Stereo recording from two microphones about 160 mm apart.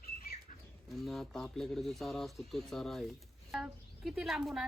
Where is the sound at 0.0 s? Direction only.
70° left (ahead or behind).